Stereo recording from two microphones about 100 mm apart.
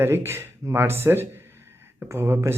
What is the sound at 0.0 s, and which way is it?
Speech, 25° right (ahead or behind).